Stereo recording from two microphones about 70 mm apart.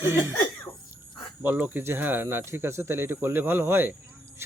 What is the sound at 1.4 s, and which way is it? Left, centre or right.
Speech, right.